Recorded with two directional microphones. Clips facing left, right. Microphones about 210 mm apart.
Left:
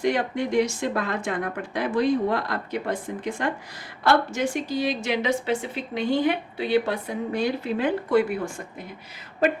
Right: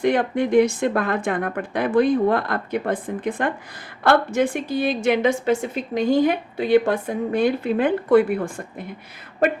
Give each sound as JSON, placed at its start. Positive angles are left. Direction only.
{"t": 0.0, "sound": "a woman's voice", "side_deg": -55}